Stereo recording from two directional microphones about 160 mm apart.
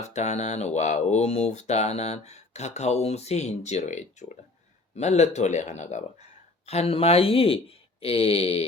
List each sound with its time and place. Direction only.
0.0 s speech: 45° left (ahead or behind)